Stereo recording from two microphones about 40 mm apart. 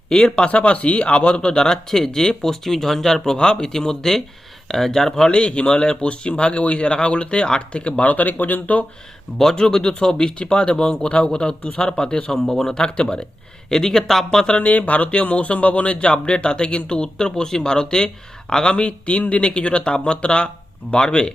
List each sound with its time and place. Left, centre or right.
0.1 s speech: centre
5.3 s speech: left
8.1 s speech: left
9.4 s speech: centre
12.3 s speech: centre
12.7 s speech: left
13.7 s speech: centre
14.3 s speech: left
14.7 s speech: left